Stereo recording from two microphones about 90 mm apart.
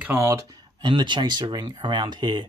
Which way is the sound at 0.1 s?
30° right (ahead or behind).